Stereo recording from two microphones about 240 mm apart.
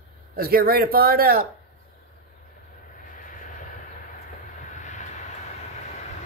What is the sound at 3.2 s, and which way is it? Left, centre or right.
Vehicle, left.